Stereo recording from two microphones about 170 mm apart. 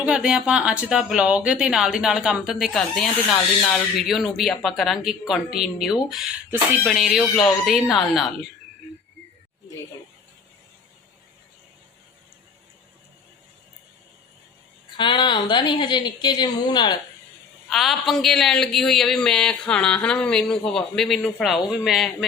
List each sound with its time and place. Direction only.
0.0 s speech: 5° right (ahead or behind)
14.9 s a woman's voice: 25° left (ahead or behind)
17.7 s a man's voice: centre (ahead or behind)